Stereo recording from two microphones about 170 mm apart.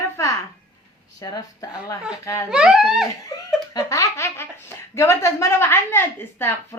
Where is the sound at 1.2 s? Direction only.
20° left (ahead or behind).